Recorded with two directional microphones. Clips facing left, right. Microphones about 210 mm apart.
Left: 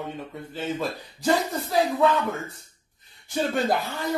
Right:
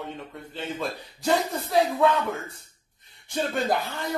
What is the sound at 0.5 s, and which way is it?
Speech, centre (ahead or behind).